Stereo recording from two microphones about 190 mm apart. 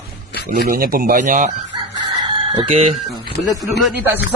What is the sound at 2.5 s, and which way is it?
Speech, 30° right (ahead or behind).